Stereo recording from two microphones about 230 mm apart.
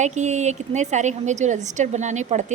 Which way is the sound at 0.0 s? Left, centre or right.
Right.